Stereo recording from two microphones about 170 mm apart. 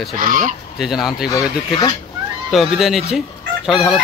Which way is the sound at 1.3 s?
25° left (ahead or behind).